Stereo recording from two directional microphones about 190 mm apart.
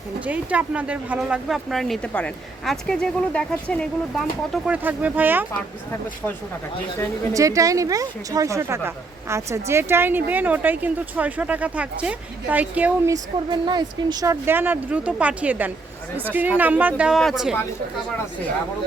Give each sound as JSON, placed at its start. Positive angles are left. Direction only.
{"t": 0.3, "sound": "speech", "side_deg": -5}
{"t": 7.3, "sound": "speech", "side_deg": -15}
{"t": 13.5, "sound": "speech", "side_deg": -25}